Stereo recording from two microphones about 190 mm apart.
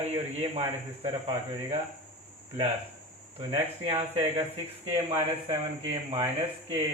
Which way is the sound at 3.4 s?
25° right (ahead or behind).